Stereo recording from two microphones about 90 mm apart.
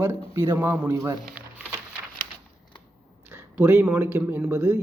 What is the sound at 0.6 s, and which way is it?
Speech, 20° right (ahead or behind).